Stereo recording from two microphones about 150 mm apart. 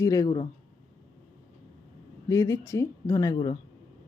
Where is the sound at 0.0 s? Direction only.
20° left (ahead or behind).